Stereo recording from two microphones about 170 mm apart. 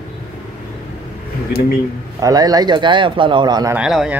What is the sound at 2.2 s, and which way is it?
A man's voice, 20° right (ahead or behind).